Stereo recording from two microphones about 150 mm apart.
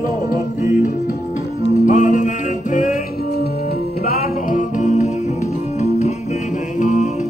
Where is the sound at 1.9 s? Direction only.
55° left (ahead or behind).